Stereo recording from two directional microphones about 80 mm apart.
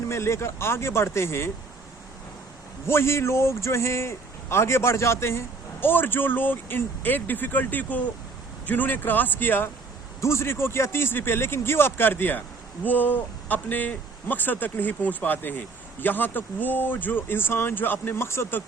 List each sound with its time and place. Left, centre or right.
0.1 s a man's voice: left
2.8 s a man's voice: left